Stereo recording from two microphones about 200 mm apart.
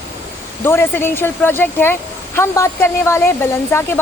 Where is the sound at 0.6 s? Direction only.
10° left (ahead or behind).